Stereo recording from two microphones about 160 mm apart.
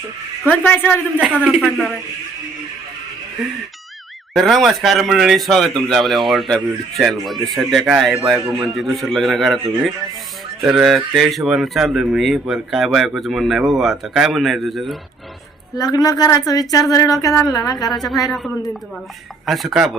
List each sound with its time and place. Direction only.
0.5 s a woman's voice: 10° left (ahead or behind)
1.6 s speech: centre (ahead or behind)
4.4 s speech: centre (ahead or behind)
15.7 s a woman's voice: 25° left (ahead or behind)
17.9 s speech: centre (ahead or behind)